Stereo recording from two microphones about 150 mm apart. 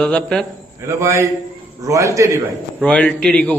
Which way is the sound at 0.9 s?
20° right (ahead or behind).